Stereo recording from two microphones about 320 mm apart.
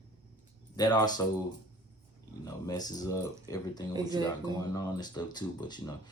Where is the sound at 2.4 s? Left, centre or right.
Centre.